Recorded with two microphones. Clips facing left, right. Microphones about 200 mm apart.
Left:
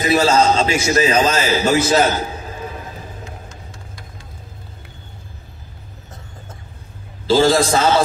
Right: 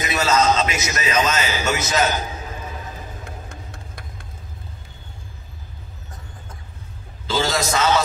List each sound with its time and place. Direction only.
0.0 s a man's voice: 30° left (ahead or behind)
3.3 s vehicle: 55° right (ahead or behind)
7.2 s a man's voice: 30° left (ahead or behind)